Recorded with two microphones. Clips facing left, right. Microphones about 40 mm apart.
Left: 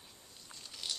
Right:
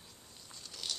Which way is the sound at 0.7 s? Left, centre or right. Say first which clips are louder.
Even; centre.